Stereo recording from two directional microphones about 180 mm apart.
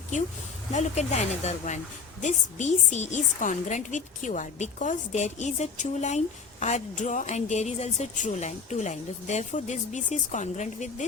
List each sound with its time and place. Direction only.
0.7 s a woman's voice: 40° left (ahead or behind)